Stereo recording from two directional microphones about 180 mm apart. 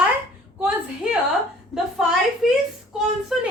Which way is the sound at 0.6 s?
5° right (ahead or behind).